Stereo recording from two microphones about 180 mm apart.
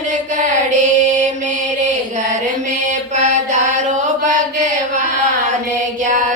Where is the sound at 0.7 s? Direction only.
40° right (ahead or behind).